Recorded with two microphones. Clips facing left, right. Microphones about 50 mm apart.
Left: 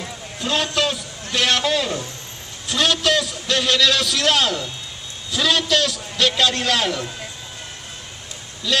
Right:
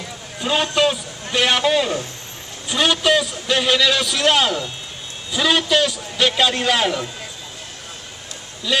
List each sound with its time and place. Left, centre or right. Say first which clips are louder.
0.4 s a man's voice: right 3 dB; centre
8.7 s speech: right 1 dB; centre